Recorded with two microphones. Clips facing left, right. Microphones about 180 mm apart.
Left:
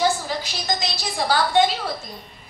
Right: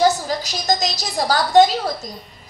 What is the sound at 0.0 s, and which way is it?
A woman's voice, 40° right (ahead or behind).